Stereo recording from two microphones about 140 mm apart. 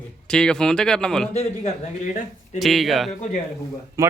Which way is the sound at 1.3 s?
50° left (ahead or behind).